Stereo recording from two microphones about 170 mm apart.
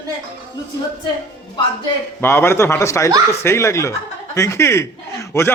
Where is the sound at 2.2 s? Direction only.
15° left (ahead or behind).